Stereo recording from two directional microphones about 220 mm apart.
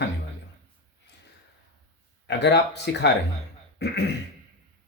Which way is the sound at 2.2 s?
50° left (ahead or behind).